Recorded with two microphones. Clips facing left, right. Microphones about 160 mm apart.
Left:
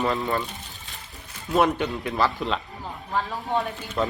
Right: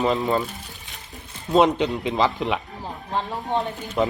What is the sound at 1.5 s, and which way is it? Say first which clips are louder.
Speech: right 4 dB; 20° right (ahead or behind).